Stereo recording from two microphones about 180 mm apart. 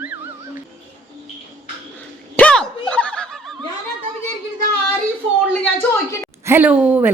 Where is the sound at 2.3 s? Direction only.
5° left (ahead or behind).